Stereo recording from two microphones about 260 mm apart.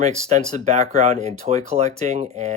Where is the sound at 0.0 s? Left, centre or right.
Right.